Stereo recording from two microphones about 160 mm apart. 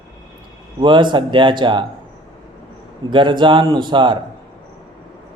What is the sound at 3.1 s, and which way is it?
A man's voice, 30° right (ahead or behind).